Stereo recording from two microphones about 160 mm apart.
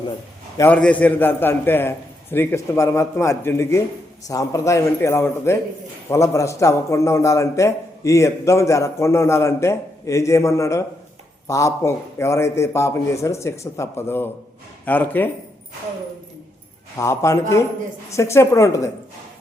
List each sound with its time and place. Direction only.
0.5 s a man's voice: 15° left (ahead or behind)
17.0 s a man's voice: 20° left (ahead or behind)